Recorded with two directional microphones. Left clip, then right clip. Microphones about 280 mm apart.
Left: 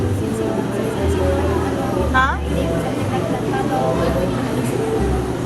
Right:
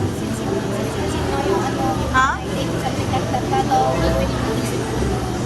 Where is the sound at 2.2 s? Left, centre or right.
Centre.